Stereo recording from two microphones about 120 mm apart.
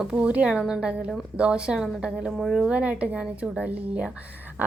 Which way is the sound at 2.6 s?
10° right (ahead or behind).